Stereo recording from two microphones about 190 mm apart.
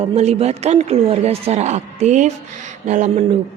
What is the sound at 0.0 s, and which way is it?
Speech, 35° right (ahead or behind).